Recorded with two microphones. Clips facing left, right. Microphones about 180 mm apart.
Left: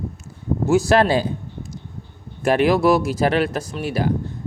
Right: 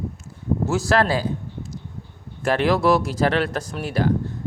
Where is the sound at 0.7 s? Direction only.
15° left (ahead or behind).